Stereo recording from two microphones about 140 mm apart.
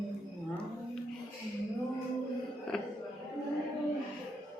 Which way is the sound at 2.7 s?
5° left (ahead or behind).